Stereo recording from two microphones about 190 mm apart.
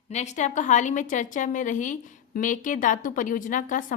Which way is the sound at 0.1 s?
35° left (ahead or behind).